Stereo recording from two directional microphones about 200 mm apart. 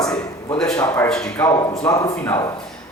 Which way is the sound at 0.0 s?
20° left (ahead or behind).